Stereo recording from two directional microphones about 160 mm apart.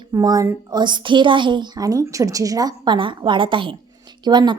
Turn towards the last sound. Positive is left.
turn(degrees=-25)  # may be behind; listen again after turning